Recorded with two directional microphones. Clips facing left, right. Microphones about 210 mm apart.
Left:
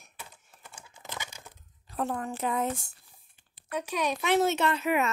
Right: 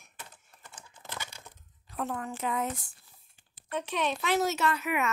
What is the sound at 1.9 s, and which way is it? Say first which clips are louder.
Speech: left 3 dB; 35° left (ahead or behind).